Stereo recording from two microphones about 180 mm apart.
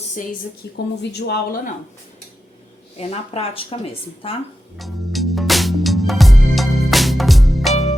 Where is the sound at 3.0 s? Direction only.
35° left (ahead or behind).